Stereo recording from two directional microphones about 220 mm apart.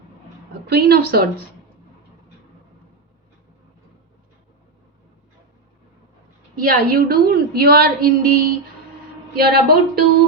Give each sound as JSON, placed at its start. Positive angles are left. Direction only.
{"t": 0.7, "sound": "a woman's voice", "side_deg": -45}
{"t": 6.6, "sound": "a woman's voice", "side_deg": -45}